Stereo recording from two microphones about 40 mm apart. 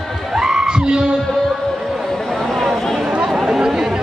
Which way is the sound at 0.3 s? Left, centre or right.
Centre.